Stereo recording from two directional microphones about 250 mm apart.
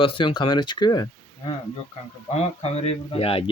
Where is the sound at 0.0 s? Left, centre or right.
Left.